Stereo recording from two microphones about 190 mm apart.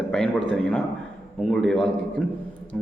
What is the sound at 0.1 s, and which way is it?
A man's voice, 5° left (ahead or behind).